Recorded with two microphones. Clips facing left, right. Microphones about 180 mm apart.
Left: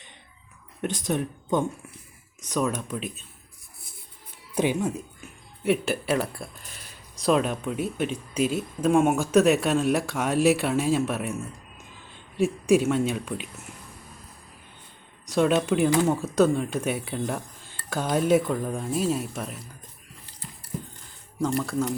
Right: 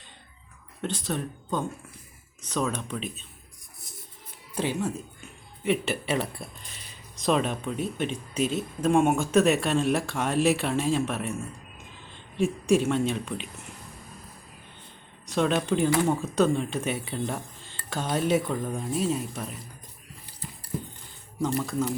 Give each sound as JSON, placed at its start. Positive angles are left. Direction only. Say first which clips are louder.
{"t": 0.8, "sound": "speech", "louder": "left 3 dB", "side_deg": 15}
{"t": 4.5, "sound": "speech", "louder": "left 4 dB", "side_deg": 15}
{"t": 5.6, "sound": "speech", "louder": "left 2 dB", "side_deg": 0}
{"t": 12.4, "sound": "speech", "louder": "left 2 dB", "side_deg": 5}
{"t": 15.3, "sound": "speech", "louder": "left 3 dB", "side_deg": 5}
{"t": 21.3, "sound": "speech", "louder": "left 2 dB", "side_deg": 0}